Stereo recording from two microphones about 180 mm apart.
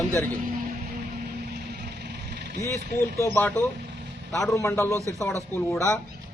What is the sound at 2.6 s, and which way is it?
Speech, 15° left (ahead or behind).